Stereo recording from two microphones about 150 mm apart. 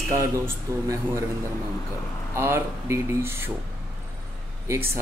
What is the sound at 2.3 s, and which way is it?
Speech, 20° right (ahead or behind).